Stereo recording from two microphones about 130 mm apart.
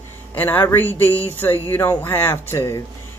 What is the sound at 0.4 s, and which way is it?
Speech, 15° left (ahead or behind).